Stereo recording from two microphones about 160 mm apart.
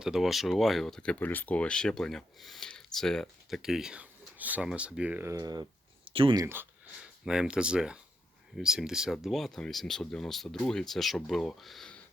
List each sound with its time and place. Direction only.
0.0 s speech: centre (ahead or behind); by 6.4 s 30° right (ahead or behind)
6.4 s speech: 15° right (ahead or behind)